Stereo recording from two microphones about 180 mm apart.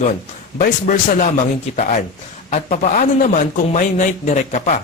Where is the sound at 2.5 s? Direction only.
40° left (ahead or behind).